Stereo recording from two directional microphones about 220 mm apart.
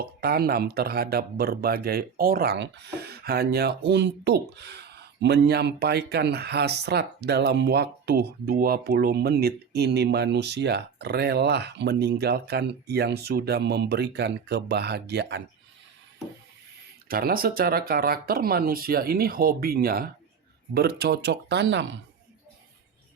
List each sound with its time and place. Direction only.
0.0 s speech: 45° right (ahead or behind)
17.1 s speech: 40° right (ahead or behind)